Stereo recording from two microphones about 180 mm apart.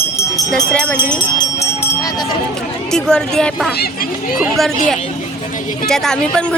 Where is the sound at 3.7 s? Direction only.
55° left (ahead or behind).